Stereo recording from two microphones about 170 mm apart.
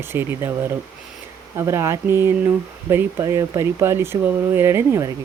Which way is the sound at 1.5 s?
15° right (ahead or behind).